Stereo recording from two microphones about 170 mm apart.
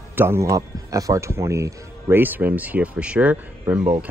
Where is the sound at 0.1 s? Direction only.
15° right (ahead or behind).